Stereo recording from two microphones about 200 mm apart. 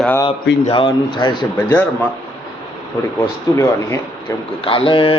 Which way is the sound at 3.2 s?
15° left (ahead or behind).